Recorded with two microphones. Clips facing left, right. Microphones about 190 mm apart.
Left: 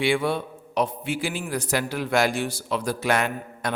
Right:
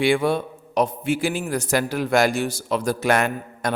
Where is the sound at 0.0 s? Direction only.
45° right (ahead or behind).